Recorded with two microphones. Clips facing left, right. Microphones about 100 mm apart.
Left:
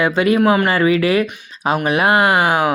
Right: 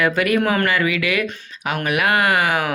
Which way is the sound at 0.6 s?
35° left (ahead or behind).